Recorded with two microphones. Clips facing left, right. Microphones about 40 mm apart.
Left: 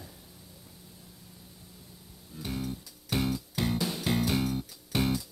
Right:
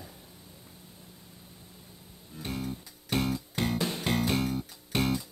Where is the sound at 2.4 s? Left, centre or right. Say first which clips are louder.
Even; centre.